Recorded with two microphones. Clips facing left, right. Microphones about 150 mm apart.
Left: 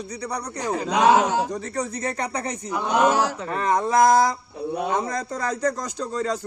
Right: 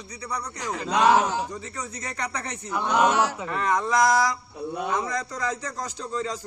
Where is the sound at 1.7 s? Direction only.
35° left (ahead or behind).